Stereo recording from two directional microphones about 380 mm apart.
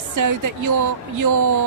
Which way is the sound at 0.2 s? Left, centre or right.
Right.